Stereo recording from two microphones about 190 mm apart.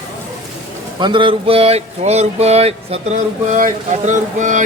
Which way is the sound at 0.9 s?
25° right (ahead or behind).